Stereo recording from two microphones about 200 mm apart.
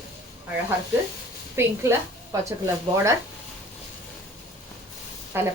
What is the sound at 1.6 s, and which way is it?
Speech, 10° right (ahead or behind).